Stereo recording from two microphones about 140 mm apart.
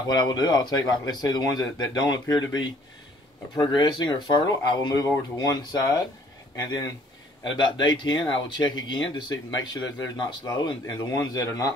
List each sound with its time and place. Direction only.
0.1 s speech: 30° left (ahead or behind)
7.6 s speech: 35° left (ahead or behind)